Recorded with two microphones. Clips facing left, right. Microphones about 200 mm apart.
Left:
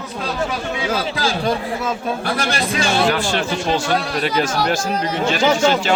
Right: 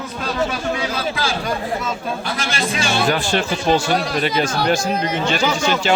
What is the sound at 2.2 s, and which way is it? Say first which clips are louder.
Speech: left 4 dB; 60° left (ahead or behind).